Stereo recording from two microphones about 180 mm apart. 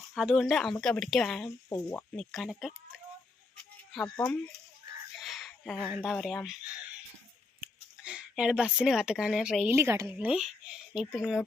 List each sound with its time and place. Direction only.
0.1 s a woman's voice: centre (ahead or behind)
1.7 s speech: 15° left (ahead or behind)
2.1 s a woman's voice: centre (ahead or behind)
5.2 s speech: centre (ahead or behind)
8.0 s a woman's voice: 5° right (ahead or behind)